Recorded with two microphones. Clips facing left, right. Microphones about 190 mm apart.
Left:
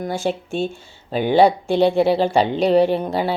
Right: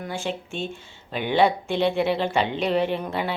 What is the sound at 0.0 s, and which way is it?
A woman's voice, 40° left (ahead or behind).